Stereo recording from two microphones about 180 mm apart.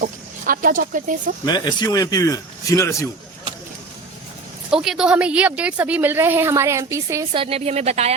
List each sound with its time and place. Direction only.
0.0 s speech: 50° right (ahead or behind)
1.5 s speech: 25° left (ahead or behind)
4.7 s speech: 5° right (ahead or behind)
7.3 s a woman's voice: 30° right (ahead or behind)